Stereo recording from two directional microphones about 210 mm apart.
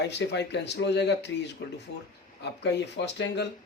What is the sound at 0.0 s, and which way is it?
Speech, 55° left (ahead or behind).